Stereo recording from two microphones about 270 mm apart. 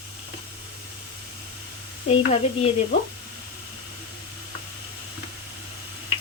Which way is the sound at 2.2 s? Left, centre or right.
Left.